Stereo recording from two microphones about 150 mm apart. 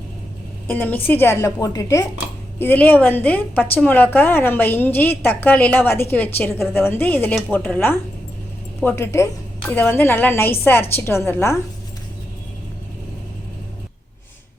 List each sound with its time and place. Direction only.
0.7 s a woman's voice: 10° left (ahead or behind)